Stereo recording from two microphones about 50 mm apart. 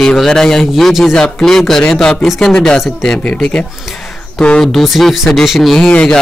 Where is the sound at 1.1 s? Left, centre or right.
Centre.